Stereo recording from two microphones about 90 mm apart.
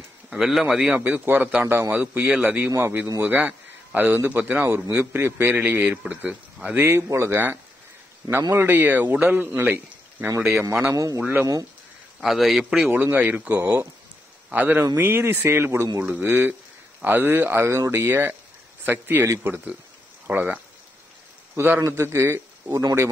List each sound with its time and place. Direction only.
0.3 s a man's voice: 5° right (ahead or behind)
0.9 s a man's voice: 20° right (ahead or behind)
12.2 s a man's voice: centre (ahead or behind)
12.9 s a man's voice: 20° right (ahead or behind)